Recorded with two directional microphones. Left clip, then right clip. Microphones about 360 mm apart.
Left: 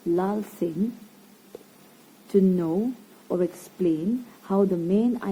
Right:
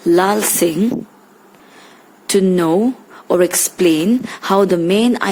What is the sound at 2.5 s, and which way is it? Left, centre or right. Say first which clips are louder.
A woman's voice: right 12 dB; right.